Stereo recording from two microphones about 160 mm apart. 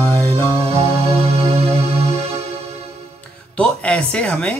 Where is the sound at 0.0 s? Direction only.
10° left (ahead or behind).